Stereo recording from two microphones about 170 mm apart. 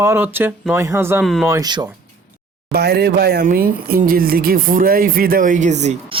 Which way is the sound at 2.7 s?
70° right (ahead or behind).